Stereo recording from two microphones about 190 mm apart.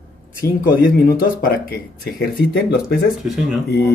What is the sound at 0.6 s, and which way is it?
Speech, 50° left (ahead or behind).